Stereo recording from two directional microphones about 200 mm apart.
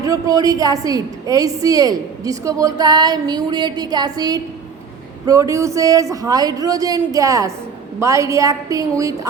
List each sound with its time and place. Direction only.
0.0 s a man's voice: 15° right (ahead or behind)